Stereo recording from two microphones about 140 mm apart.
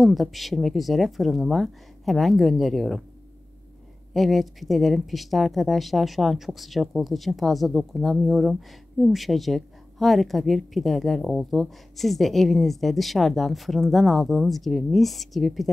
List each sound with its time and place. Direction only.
0.0 s speech: centre (ahead or behind)
4.1 s speech: centre (ahead or behind)